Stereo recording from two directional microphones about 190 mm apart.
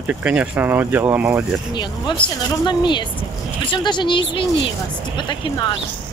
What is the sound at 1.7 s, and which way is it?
Speech, 20° left (ahead or behind).